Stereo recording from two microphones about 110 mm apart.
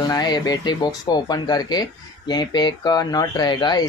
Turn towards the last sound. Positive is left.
turn(degrees=40)  # may be behind; listen again after turning